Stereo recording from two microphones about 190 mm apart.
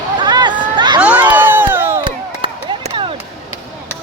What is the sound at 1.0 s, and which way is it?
Crowd, 5° right (ahead or behind).